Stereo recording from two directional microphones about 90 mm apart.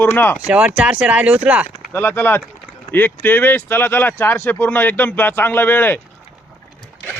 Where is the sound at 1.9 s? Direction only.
20° left (ahead or behind).